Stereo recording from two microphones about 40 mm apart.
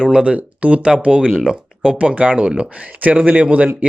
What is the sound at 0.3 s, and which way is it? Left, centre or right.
A man's voice, right.